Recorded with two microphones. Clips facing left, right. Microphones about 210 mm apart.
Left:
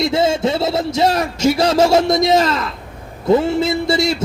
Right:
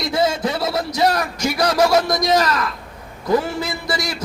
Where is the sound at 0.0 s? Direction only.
25° left (ahead or behind).